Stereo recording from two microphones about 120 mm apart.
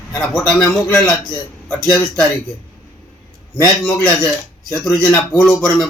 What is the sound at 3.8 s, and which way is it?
A man's voice, 5° left (ahead or behind).